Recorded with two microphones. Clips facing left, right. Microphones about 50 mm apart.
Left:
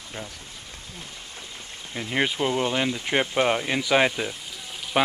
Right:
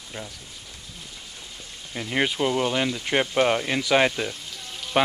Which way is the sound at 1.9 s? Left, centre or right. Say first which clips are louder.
Even; centre.